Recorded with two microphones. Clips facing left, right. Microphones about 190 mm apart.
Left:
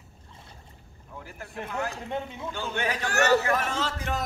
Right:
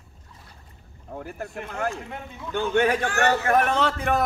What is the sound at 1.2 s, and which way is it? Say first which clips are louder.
A man's voice: right 4 dB; 50° right (ahead or behind).